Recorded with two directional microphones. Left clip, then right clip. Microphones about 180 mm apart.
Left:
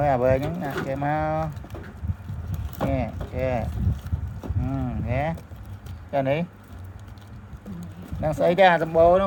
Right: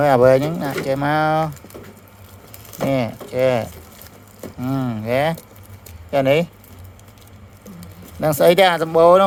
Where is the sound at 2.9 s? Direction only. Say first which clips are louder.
Right 10 dB; 40° right (ahead or behind).